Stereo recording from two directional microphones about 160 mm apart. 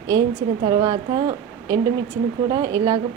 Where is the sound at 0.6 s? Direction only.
30° right (ahead or behind).